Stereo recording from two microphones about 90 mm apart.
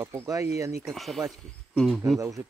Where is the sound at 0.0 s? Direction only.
35° right (ahead or behind).